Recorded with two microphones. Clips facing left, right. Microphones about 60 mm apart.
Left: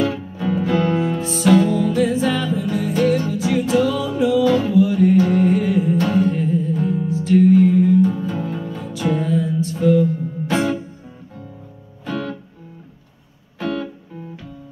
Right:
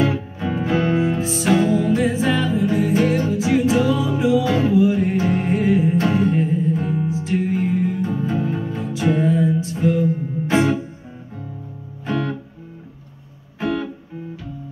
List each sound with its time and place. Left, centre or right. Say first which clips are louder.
0.0 s music: even; right
12.0 s music: right 2 dB; right
13.6 s music: right 1 dB; right